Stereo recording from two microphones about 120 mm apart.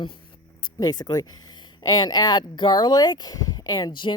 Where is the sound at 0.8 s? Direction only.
35° left (ahead or behind).